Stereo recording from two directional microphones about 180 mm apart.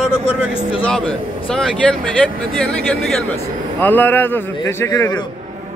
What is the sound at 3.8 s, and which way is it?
A man's voice, 10° left (ahead or behind).